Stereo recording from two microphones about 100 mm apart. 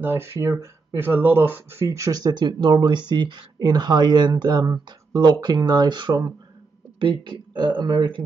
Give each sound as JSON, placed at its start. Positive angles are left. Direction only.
{"t": 0.0, "sound": "speech", "side_deg": -25}
{"t": 1.0, "sound": "speech", "side_deg": -20}